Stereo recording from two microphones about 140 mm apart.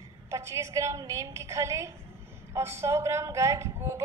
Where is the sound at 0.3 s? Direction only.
20° right (ahead or behind).